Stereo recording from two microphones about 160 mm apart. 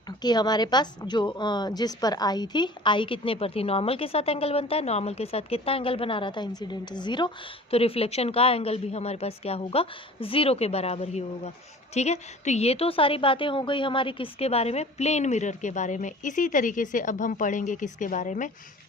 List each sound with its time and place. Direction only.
0.2 s a woman's voice: 25° left (ahead or behind); by 18.5 s 50° left (ahead or behind)